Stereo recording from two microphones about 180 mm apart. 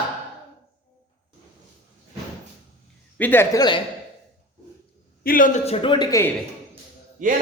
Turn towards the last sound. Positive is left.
turn(degrees=-45)  # may be behind; listen again after turning